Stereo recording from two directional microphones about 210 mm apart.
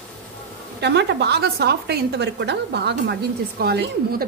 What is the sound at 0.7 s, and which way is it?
A woman's voice, 55° right (ahead or behind).